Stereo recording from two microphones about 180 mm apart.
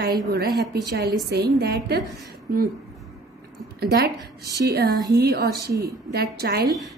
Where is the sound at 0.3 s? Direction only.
60° right (ahead or behind).